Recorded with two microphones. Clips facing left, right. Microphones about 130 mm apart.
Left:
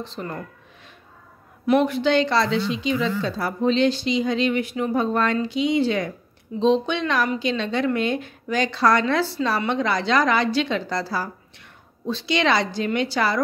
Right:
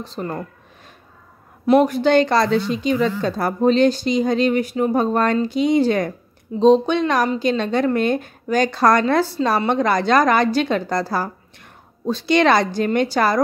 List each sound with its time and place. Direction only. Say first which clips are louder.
0.0 s speech: right 4 dB; 40° right (ahead or behind)
1.7 s a woman's voice: right 4 dB; 40° right (ahead or behind)